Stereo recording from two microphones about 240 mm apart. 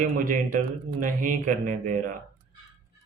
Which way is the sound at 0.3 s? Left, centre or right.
Right.